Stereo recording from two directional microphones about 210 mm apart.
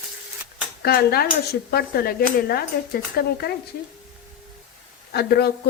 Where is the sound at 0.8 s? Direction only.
50° left (ahead or behind).